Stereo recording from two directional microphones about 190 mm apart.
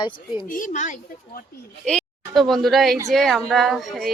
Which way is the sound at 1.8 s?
5° left (ahead or behind).